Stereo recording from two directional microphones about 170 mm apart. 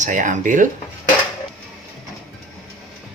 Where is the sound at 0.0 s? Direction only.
50° right (ahead or behind).